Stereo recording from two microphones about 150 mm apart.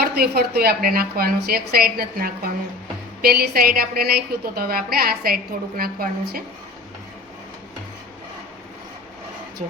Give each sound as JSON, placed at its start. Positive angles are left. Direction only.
{"t": 0.0, "sound": "a woman's voice", "side_deg": -90}
{"t": 3.2, "sound": "a woman's voice", "side_deg": -90}